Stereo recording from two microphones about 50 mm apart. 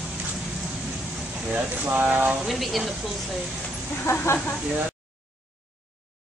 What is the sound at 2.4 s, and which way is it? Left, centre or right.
Speech, centre.